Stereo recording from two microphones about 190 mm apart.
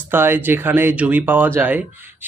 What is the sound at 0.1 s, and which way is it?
Speech, 10° right (ahead or behind).